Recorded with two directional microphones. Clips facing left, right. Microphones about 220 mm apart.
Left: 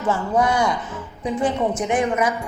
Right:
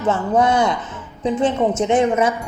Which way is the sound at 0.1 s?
20° right (ahead or behind).